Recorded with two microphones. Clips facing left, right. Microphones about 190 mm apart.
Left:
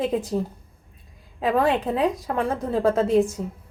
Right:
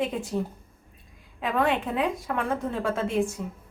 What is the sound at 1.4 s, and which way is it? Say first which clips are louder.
A woman's voice: left 4 dB; 35° left (ahead or behind).